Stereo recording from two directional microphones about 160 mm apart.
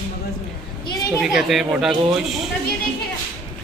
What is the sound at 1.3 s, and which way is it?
Speech, centre (ahead or behind).